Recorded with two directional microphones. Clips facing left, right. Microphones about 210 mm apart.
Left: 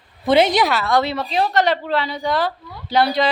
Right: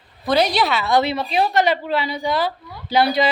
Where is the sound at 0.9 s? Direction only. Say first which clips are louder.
Right 1 dB; 15° right (ahead or behind).